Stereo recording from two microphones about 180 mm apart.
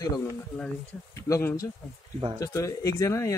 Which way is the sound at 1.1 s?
15° left (ahead or behind).